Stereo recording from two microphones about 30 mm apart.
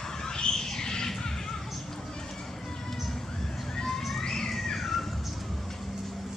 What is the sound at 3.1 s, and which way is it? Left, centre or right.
Horse, centre.